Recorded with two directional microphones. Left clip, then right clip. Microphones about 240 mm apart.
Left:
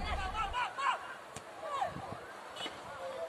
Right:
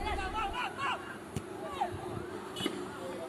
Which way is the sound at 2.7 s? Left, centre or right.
Right.